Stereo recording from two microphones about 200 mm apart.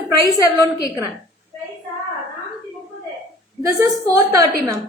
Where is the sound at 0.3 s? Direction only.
20° left (ahead or behind).